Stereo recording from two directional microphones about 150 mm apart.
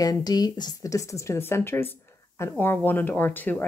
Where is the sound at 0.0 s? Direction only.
25° left (ahead or behind).